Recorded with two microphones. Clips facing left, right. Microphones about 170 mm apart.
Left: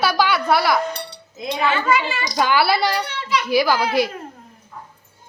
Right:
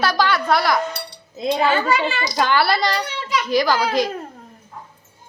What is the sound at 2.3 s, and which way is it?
A woman's voice, 5° left (ahead or behind).